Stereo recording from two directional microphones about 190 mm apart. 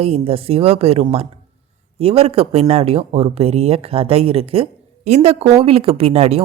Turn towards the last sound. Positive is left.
turn(degrees=-30)  # may be behind; listen again after turning